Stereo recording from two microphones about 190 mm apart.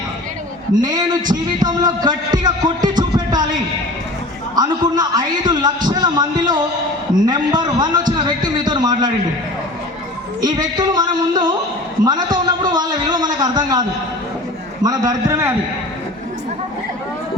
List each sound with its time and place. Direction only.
0.8 s a man's voice: 20° right (ahead or behind)
1.6 s music: 20° right (ahead or behind)
4.5 s a man's voice: 20° right (ahead or behind)
10.4 s a man's voice: 20° right (ahead or behind)
14.8 s a man's voice: 20° right (ahead or behind)